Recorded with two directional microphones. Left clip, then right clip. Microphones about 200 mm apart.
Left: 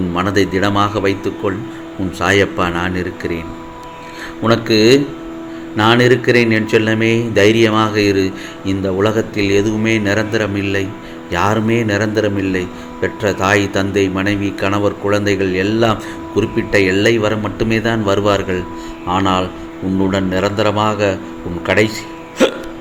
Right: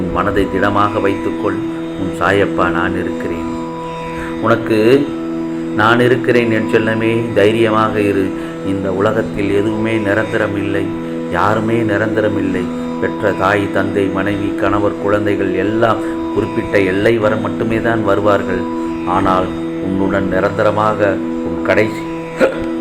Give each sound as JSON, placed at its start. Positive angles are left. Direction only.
{"t": 0.2, "sound": "a man's voice", "side_deg": 50}
{"t": 4.4, "sound": "a man's voice", "side_deg": 50}